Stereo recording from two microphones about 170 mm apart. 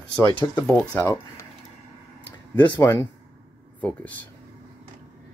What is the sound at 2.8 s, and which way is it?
Speech, 15° left (ahead or behind).